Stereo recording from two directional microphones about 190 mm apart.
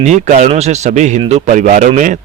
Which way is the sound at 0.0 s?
40° right (ahead or behind).